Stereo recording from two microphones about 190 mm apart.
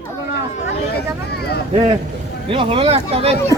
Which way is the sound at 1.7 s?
25° right (ahead or behind).